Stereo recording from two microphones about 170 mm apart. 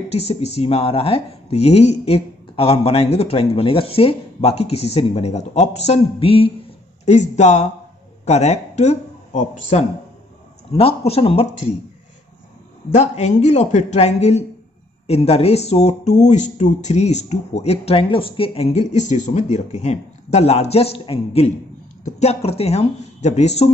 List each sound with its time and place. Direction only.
0.3 s speech: 40° left (ahead or behind)
7.1 s speech: 45° left (ahead or behind)
12.9 s speech: 40° left (ahead or behind)